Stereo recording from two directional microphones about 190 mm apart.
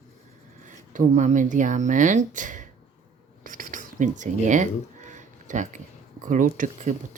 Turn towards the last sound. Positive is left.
turn(degrees=-45)  # may be behind; listen again after turning